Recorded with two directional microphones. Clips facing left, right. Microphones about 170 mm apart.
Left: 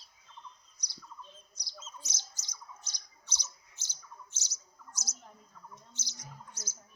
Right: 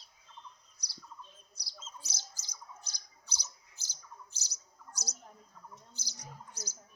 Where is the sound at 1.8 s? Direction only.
35° right (ahead or behind).